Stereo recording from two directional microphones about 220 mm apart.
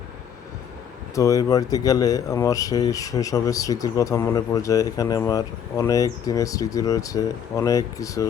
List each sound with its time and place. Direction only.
1.1 s speech: 15° left (ahead or behind)